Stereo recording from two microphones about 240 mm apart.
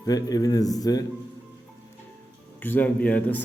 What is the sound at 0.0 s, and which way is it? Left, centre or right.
A man's voice, centre.